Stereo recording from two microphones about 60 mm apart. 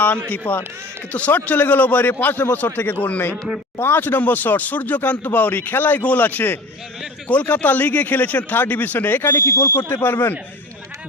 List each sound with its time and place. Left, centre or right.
0.3 s a man's voice: left